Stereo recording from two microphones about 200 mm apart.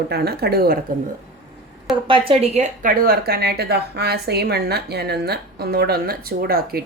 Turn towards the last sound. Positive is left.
turn(degrees=-50)  # may be behind; listen again after turning